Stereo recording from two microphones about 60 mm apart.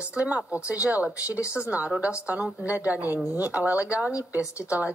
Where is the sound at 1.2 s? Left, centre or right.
Left.